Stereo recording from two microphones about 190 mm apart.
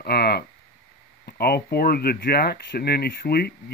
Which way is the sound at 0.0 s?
55° left (ahead or behind).